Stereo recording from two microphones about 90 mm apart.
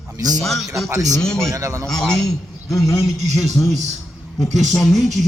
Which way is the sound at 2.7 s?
35° left (ahead or behind).